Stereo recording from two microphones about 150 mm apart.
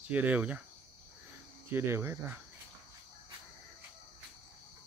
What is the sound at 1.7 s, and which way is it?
Speech, 15° right (ahead or behind).